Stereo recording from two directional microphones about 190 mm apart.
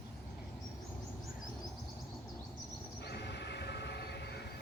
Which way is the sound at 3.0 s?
60° left (ahead or behind).